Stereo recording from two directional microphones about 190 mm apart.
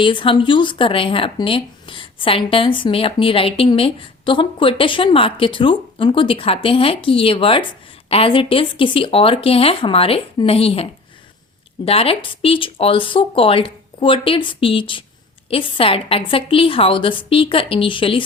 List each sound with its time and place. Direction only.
0.0 s speech: 25° left (ahead or behind)
11.9 s speech: 30° left (ahead or behind)